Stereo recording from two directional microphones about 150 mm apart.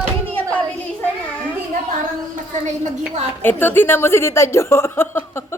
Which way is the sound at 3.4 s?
15° left (ahead or behind).